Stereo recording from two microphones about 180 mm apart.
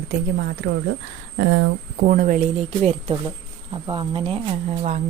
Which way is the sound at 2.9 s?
30° right (ahead or behind).